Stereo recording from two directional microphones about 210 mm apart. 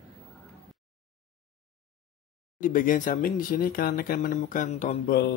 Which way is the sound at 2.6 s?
40° left (ahead or behind).